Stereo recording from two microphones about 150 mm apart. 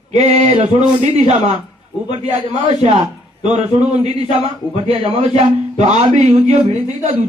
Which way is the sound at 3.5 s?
50° right (ahead or behind).